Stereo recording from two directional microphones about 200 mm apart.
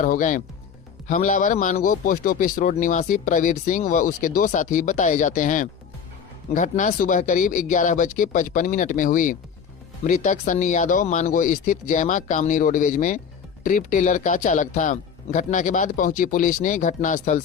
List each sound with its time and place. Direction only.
0.0 s a man's voice: 40° left (ahead or behind)